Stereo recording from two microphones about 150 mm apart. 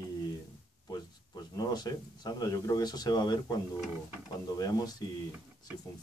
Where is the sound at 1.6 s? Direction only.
25° left (ahead or behind).